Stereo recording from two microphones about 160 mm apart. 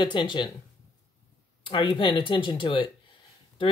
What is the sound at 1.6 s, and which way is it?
Speech, 30° left (ahead or behind).